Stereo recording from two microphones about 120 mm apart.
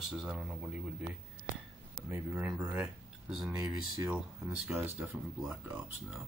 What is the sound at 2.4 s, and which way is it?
Speech, 10° right (ahead or behind).